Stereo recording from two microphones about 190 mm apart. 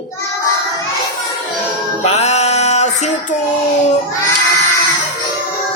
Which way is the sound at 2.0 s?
35° left (ahead or behind).